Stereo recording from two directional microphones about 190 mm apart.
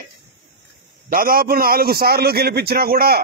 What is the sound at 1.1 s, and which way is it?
A man's voice, 50° right (ahead or behind).